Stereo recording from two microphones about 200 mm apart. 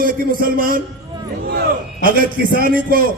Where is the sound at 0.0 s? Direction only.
45° right (ahead or behind).